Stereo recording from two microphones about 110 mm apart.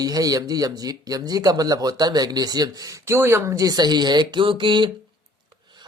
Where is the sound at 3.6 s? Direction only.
40° right (ahead or behind).